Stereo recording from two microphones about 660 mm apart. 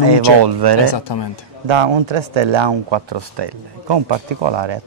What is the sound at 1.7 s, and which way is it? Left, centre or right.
Speech, right.